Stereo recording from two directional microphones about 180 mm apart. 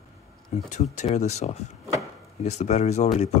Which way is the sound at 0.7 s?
40° left (ahead or behind).